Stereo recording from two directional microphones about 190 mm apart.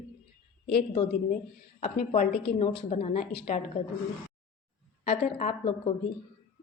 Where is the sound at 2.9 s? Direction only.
35° left (ahead or behind).